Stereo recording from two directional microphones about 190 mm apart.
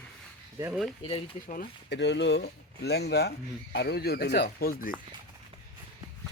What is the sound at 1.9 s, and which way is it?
Speech, 65° left (ahead or behind).